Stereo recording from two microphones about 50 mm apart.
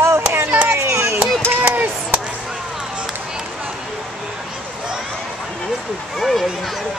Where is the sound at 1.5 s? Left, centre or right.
Right.